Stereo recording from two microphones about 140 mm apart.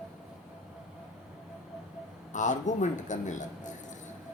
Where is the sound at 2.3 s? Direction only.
60° left (ahead or behind).